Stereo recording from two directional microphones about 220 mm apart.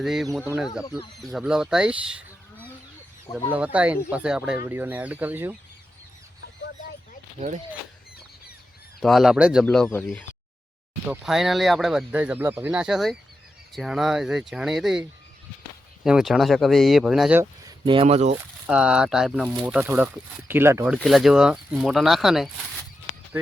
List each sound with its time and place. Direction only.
0.0 s speech: centre (ahead or behind)
3.5 s speech: 5° right (ahead or behind)
7.3 s speech: 35° right (ahead or behind)
9.0 s speech: centre (ahead or behind)
16.0 s speech: 5° right (ahead or behind)
17.4 s speech: 20° right (ahead or behind)
18.6 s speech: 5° right (ahead or behind)